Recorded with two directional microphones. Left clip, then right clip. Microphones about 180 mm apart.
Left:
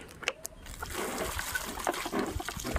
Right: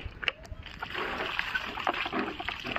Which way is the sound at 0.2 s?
55° left (ahead or behind).